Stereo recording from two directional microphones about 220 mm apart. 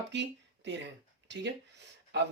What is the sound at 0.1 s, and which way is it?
Speech, 55° right (ahead or behind).